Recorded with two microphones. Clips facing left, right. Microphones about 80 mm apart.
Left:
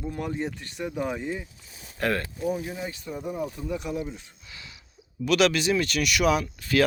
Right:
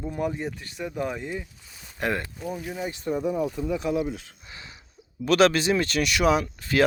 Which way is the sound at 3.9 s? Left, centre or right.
Right.